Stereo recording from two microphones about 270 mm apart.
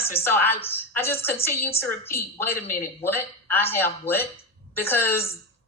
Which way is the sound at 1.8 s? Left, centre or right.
Left.